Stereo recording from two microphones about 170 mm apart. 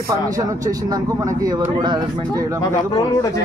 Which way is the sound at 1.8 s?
25° right (ahead or behind).